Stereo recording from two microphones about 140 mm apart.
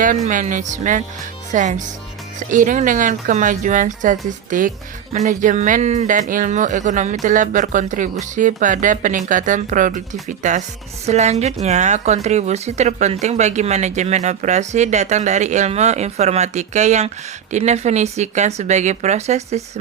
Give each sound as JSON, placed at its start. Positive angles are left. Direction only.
{"t": 0.0, "sound": "a woman's voice", "side_deg": -70}
{"t": 2.5, "sound": "a woman's voice", "side_deg": -70}